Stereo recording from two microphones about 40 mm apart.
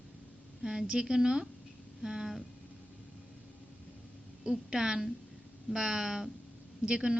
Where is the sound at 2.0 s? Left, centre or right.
Centre.